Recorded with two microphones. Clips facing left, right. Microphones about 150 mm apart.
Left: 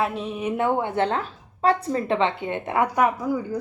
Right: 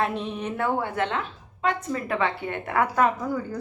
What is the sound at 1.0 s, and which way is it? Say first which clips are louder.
A woman's voice: left 3 dB; 35° left (ahead or behind).